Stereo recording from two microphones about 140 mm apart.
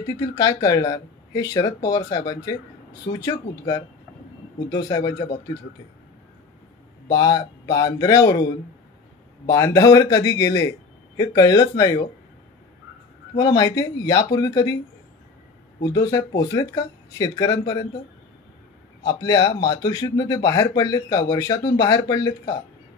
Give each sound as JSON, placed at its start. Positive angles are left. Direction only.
{"t": 0.2, "sound": "speech", "side_deg": 25}
{"t": 7.1, "sound": "speech", "side_deg": 25}
{"t": 9.5, "sound": "speech", "side_deg": 25}
{"t": 13.4, "sound": "speech", "side_deg": 25}
{"t": 15.8, "sound": "speech", "side_deg": 25}
{"t": 19.0, "sound": "speech", "side_deg": 25}